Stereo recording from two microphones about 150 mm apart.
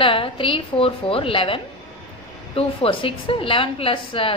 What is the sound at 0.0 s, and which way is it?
A woman's voice, 35° left (ahead or behind).